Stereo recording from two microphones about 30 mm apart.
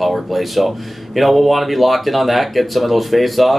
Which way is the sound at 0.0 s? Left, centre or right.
Centre.